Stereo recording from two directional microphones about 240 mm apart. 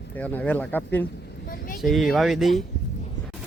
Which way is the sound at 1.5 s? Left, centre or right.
Left.